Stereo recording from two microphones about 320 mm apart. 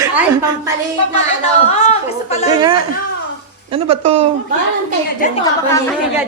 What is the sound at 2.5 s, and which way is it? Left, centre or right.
Speech, centre.